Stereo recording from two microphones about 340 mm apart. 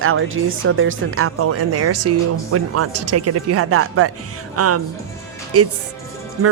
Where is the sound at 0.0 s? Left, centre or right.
Right.